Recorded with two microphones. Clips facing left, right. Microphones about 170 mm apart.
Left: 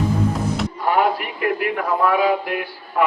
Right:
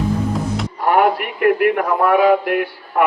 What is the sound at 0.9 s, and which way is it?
Speech, 55° right (ahead or behind).